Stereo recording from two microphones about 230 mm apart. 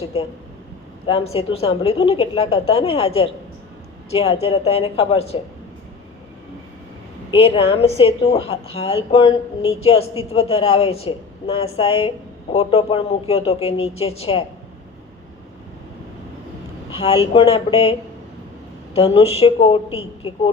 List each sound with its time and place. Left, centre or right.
1.0 s a woman's voice: left
7.3 s a woman's voice: left
16.9 s a woman's voice: left
18.9 s a woman's voice: left